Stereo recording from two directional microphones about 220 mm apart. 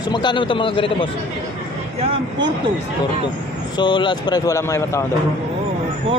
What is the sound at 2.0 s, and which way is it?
Speech, 25° right (ahead or behind).